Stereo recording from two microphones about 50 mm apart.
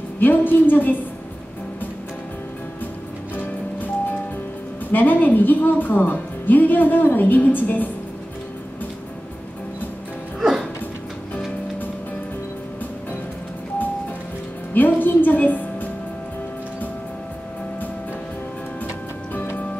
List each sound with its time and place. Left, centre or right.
0.2 s a woman's voice: left
4.9 s a woman's voice: left
14.7 s music: left